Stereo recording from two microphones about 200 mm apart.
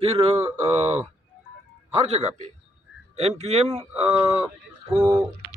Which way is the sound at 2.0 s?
35° right (ahead or behind).